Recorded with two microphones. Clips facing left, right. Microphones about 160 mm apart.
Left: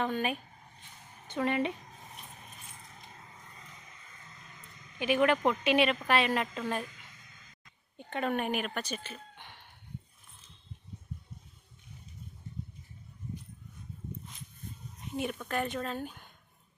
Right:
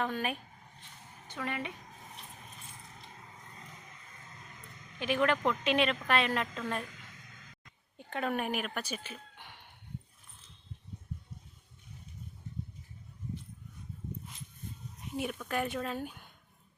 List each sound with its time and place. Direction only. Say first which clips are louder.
0.0 s a woman's voice: left 2 dB; centre (ahead or behind)
1.3 s speech: left 8 dB; 25° left (ahead or behind)
4.9 s a woman's voice: left 3 dB; 5° left (ahead or behind)
7.9 s speech: left 2 dB; centre (ahead or behind)
15.1 s speech: left 1 dB; 5° right (ahead or behind)